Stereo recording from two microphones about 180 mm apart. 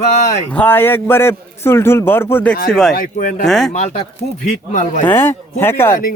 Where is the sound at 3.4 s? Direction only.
Centre (ahead or behind).